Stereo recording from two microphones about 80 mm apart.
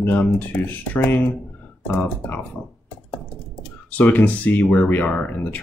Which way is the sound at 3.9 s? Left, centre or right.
Left.